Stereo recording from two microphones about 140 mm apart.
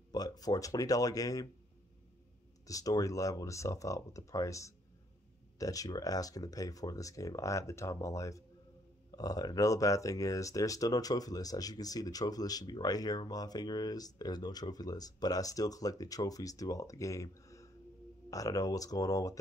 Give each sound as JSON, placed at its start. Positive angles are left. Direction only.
{"t": 0.1, "sound": "speech", "side_deg": 25}
{"t": 2.6, "sound": "speech", "side_deg": 25}